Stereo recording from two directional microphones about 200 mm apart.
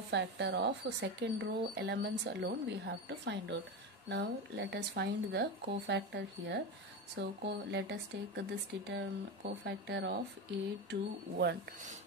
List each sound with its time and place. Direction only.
0.1 s speech: 60° right (ahead or behind)